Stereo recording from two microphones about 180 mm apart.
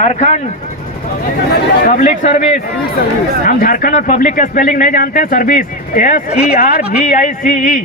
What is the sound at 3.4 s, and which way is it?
Speech, 50° left (ahead or behind).